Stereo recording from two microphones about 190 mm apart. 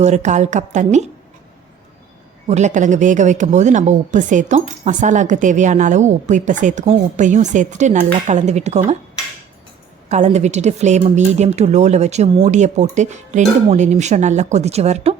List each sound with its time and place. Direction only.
0.0 s speech: 40° right (ahead or behind)
2.5 s speech: 40° right (ahead or behind)
10.1 s speech: 35° right (ahead or behind)